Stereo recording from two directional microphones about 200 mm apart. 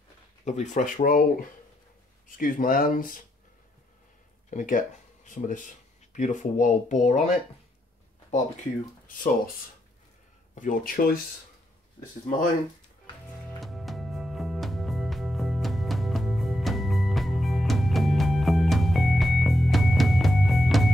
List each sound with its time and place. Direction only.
0.5 s speech: 35° left (ahead or behind)
2.2 s speech: 45° left (ahead or behind)
4.5 s speech: 40° left (ahead or behind)
9.0 s speech: 45° left (ahead or behind)
10.5 s speech: 40° left (ahead or behind)
13.6 s music: centre (ahead or behind)